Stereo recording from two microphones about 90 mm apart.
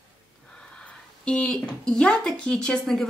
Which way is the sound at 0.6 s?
10° left (ahead or behind).